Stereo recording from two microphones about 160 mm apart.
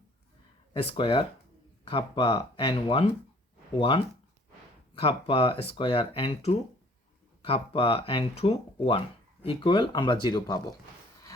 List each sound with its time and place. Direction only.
0.7 s speech: 35° left (ahead or behind)